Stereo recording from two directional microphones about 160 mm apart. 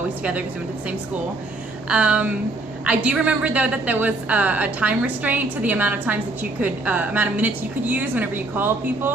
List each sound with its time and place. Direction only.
0.2 s a woman's voice: 10° right (ahead or behind)
1.9 s a woman's voice: 5° right (ahead or behind)